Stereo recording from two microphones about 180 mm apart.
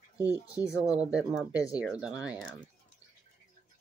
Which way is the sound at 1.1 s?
5° right (ahead or behind).